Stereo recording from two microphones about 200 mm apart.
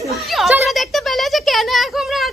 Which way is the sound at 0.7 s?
Centre (ahead or behind).